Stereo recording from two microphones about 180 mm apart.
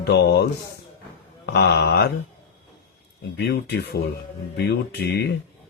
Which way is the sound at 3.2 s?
70° left (ahead or behind).